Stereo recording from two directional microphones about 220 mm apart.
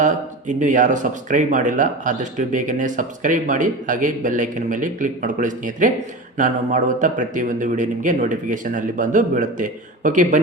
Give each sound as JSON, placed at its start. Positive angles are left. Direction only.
{"t": 0.0, "sound": "speech", "side_deg": -35}